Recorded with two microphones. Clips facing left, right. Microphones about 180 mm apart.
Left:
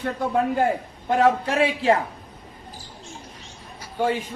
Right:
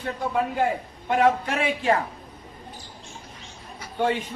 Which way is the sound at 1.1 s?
35° left (ahead or behind).